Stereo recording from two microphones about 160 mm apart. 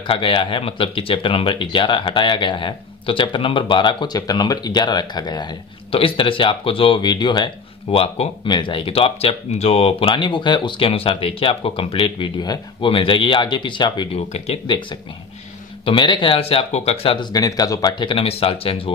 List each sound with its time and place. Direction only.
0.0 s speech: 30° left (ahead or behind)
14.3 s speech: 40° left (ahead or behind)
15.8 s speech: 30° left (ahead or behind)